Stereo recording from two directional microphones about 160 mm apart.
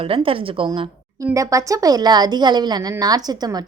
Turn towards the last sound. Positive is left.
turn(degrees=-25)  # may be behind; listen again after turning